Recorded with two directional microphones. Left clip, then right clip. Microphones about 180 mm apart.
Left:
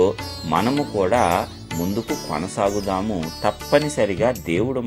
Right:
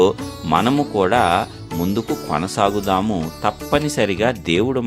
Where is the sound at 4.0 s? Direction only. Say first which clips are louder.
Right 1 dB; 35° right (ahead or behind).